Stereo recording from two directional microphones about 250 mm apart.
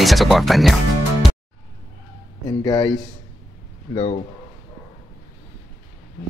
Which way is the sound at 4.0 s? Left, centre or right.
Left.